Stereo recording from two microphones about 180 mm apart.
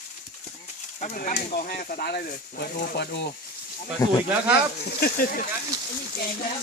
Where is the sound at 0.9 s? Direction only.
45° left (ahead or behind); by 3.3 s 65° left (ahead or behind).